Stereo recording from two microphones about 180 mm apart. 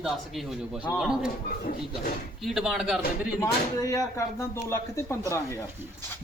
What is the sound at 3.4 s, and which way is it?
Speech, 20° left (ahead or behind).